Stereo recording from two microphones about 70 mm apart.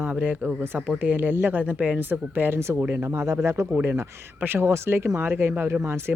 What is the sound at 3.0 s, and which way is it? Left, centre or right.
Speech, right.